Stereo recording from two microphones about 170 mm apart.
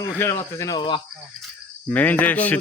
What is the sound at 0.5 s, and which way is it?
Speech, 20° left (ahead or behind).